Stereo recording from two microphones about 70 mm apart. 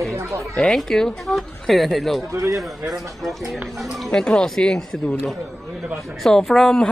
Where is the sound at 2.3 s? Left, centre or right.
Right.